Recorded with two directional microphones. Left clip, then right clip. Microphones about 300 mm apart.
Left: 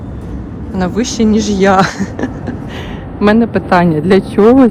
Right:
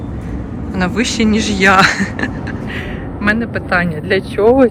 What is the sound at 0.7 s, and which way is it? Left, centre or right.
A man's voice, centre.